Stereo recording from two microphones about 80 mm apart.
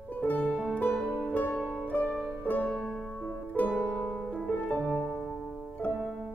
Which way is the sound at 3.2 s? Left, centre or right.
Centre.